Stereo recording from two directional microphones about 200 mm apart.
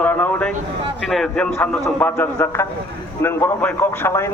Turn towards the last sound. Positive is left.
turn(degrees=15)  # may be behind; listen again after turning